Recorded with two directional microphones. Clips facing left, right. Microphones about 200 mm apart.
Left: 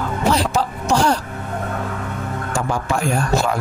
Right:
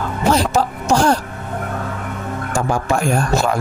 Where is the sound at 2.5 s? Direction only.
45° right (ahead or behind).